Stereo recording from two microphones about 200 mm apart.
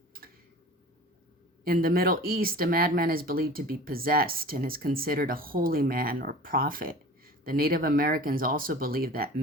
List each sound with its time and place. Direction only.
1.6 s speech: 50° right (ahead or behind)